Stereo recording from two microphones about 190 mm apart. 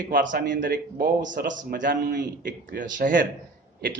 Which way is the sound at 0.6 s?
45° right (ahead or behind).